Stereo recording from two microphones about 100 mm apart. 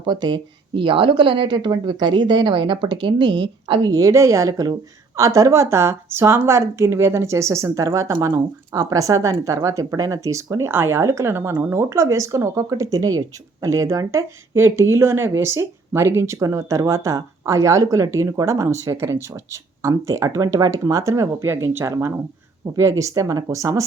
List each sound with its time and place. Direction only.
0.0 s a woman's voice: 45° right (ahead or behind)